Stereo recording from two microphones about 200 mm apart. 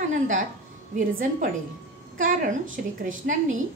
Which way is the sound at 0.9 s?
40° right (ahead or behind).